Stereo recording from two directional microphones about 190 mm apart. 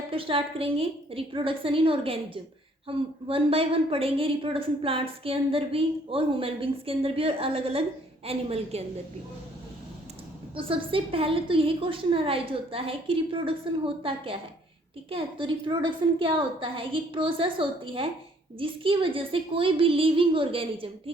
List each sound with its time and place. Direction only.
0.1 s a woman's voice: 30° right (ahead or behind)
10.5 s a woman's voice: 30° right (ahead or behind)